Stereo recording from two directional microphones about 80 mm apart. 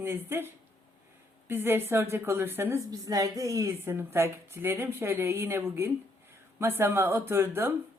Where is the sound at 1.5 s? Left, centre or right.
Right.